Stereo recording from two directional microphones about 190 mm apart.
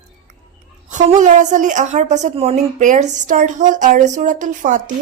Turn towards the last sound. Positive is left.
turn(degrees=-45)  # may be behind; listen again after turning